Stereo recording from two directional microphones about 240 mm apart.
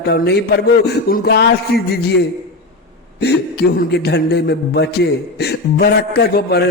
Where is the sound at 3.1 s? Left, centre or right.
Left.